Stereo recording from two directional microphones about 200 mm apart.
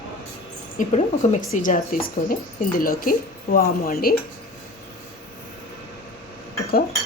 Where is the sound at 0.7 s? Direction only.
40° left (ahead or behind).